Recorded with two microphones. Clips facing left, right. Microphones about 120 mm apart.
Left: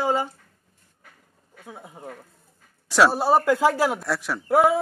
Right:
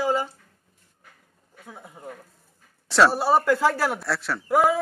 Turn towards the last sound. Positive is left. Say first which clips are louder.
# left 2 dB
turn(degrees=25)  # may be behind; listen again after turning